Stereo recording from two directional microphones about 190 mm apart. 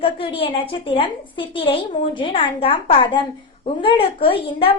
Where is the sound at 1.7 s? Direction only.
25° left (ahead or behind).